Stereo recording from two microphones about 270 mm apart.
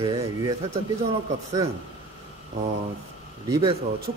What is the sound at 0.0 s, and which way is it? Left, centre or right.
Speech, centre.